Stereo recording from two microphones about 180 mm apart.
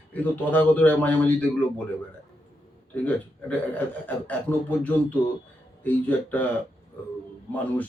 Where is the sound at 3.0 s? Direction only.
10° left (ahead or behind).